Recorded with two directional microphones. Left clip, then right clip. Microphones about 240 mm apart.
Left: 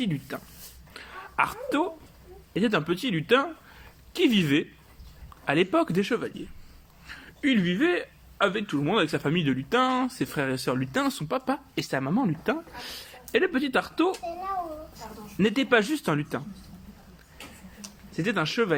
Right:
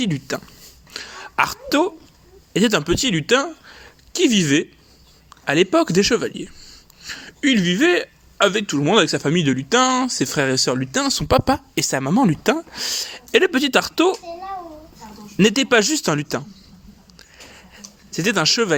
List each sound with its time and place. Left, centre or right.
0.0 s speech: right
0.9 s throat clearing: right
2.5 s speech: right
15.4 s speech: right
18.2 s speech: right